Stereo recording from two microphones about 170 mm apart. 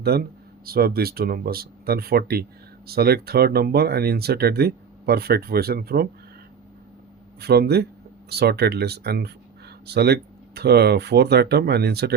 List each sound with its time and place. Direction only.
0.1 s speech: 70° right (ahead or behind)
7.3 s speech: 70° right (ahead or behind)